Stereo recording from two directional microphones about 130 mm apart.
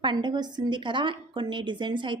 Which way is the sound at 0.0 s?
35° right (ahead or behind).